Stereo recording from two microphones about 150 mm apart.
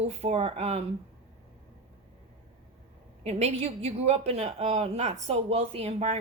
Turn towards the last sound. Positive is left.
turn(degrees=-45)  # may be behind; listen again after turning